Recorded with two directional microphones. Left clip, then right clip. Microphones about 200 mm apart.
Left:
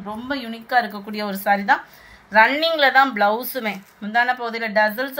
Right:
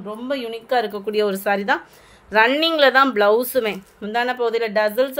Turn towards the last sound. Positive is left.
turn(degrees=-55)  # may be behind; listen again after turning